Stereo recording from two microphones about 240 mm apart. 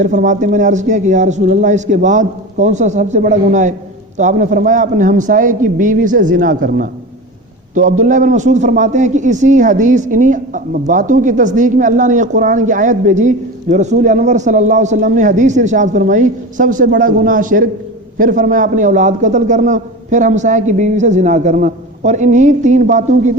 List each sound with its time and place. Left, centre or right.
0.0 s a man's voice: right